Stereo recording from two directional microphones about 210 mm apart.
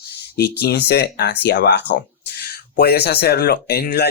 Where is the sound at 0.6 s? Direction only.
55° left (ahead or behind).